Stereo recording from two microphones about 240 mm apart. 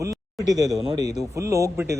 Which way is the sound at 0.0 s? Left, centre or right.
Centre.